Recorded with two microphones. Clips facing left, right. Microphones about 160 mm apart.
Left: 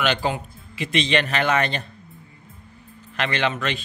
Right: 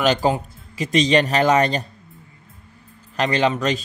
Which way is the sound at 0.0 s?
40° right (ahead or behind).